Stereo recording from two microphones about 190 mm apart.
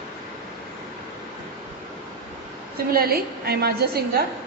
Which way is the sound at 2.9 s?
55° right (ahead or behind).